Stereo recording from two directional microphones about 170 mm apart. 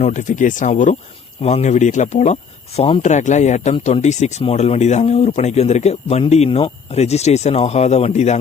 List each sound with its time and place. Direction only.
0.0 s speech: 45° left (ahead or behind)